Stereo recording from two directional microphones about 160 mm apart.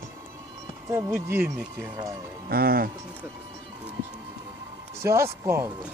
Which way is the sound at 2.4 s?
70° right (ahead or behind).